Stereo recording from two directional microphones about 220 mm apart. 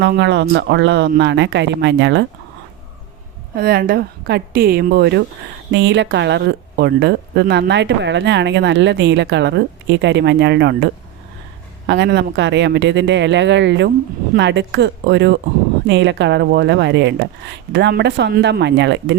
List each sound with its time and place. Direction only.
0.0 s speech: 50° right (ahead or behind)
3.5 s speech: 45° right (ahead or behind)
11.9 s speech: 50° right (ahead or behind)